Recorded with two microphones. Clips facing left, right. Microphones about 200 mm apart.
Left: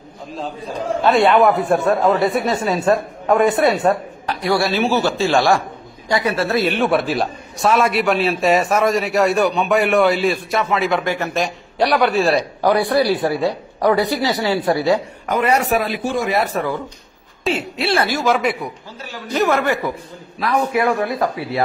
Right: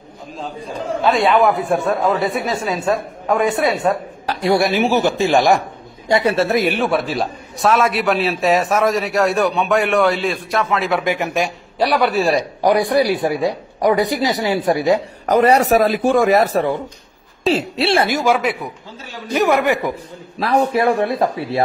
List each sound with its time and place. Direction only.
1.0 s a man's voice: centre (ahead or behind)
4.3 s a man's voice: 25° right (ahead or behind)
6.5 s a man's voice: 15° right (ahead or behind)
6.8 s a man's voice: centre (ahead or behind)
11.1 s a man's voice: 15° right (ahead or behind)
15.2 s speech: 40° right (ahead or behind)
16.0 s a man's voice: 55° right (ahead or behind); by 18.7 s 5° right (ahead or behind)
19.3 s a man's voice: 15° right (ahead or behind)
20.3 s a man's voice: 35° right (ahead or behind)